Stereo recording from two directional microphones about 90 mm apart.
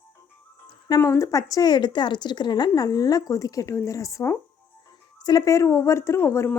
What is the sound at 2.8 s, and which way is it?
A woman's voice, 45° left (ahead or behind).